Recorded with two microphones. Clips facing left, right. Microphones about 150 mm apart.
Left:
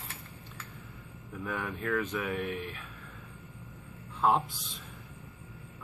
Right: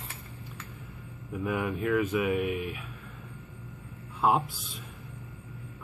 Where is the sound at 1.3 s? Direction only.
10° right (ahead or behind).